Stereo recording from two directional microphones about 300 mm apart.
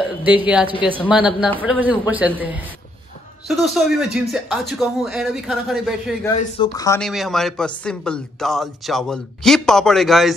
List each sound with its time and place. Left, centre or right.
0.0 s speech: centre
3.6 s speech: centre
6.3 s speech: left
6.7 s speech: centre